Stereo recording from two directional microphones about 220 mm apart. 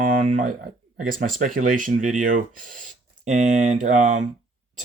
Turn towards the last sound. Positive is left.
turn(degrees=-35)  # may be behind; listen again after turning